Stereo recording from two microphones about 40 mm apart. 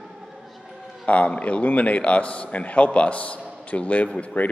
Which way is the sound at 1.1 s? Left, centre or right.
Left.